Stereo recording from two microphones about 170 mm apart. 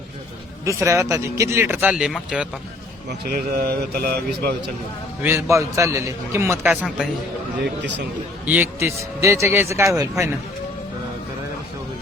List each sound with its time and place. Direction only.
0.6 s speech: 20° right (ahead or behind)
3.1 s a man's voice: 60° right (ahead or behind)
5.2 s speech: 15° right (ahead or behind)
8.4 s speech: 10° right (ahead or behind)